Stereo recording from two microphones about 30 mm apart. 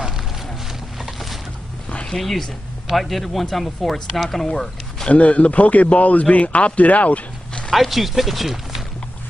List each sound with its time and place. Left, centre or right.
2.1 s speech: centre
5.1 s speech: left
7.7 s speech: centre